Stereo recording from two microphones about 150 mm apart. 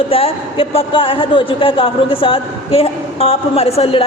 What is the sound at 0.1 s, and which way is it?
A woman's voice, 40° left (ahead or behind).